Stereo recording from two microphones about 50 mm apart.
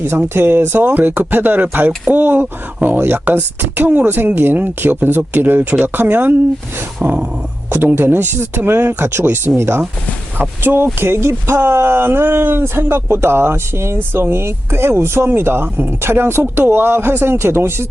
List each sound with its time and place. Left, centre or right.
0.3 s speech: right
9.6 s speech: right
10.6 s speech: right